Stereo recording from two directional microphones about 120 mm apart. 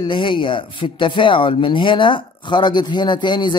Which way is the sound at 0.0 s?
45° left (ahead or behind).